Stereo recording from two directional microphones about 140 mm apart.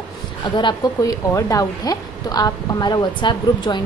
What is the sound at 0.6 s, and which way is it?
A woman's voice, 30° left (ahead or behind).